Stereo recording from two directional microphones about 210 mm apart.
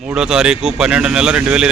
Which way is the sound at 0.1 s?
5° right (ahead or behind).